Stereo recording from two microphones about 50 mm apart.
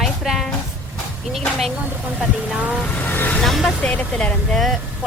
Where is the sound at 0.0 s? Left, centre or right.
Centre.